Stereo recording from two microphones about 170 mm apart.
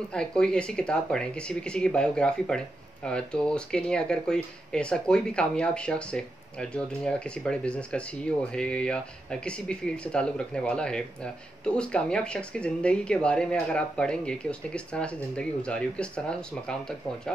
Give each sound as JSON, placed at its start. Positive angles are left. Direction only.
{"t": 0.1, "sound": "speech", "side_deg": 5}